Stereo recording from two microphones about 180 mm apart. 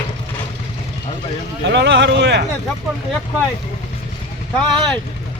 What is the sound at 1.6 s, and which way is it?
Speech, 75° right (ahead or behind).